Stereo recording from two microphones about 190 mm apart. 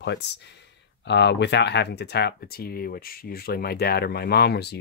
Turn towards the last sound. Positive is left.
turn(degrees=60)  # may be behind; listen again after turning